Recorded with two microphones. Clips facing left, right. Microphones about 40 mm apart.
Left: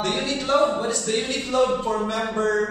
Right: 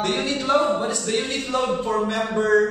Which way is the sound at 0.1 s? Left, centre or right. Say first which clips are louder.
Right 1 dB; right.